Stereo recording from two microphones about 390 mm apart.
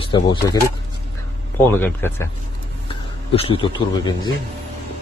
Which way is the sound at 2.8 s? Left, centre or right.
Centre.